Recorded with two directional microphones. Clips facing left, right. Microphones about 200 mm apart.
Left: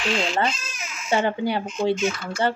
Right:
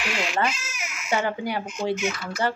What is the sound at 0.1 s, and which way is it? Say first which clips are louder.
Speech: left 2 dB; 30° left (ahead or behind).